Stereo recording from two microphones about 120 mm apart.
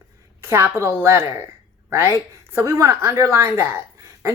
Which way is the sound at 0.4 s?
20° right (ahead or behind).